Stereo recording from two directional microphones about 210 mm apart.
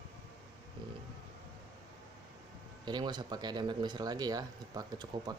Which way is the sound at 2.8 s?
20° right (ahead or behind).